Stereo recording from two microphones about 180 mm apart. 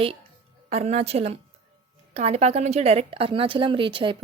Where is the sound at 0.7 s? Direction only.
35° right (ahead or behind).